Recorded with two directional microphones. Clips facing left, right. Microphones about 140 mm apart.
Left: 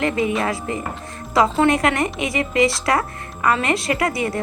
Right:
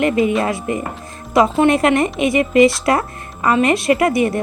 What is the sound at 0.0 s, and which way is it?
Speech, 25° right (ahead or behind).